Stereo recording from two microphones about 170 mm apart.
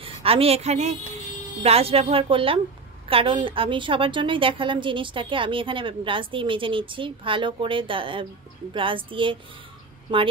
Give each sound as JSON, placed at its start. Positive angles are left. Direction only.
{"t": 0.0, "sound": "a woman's voice", "side_deg": -35}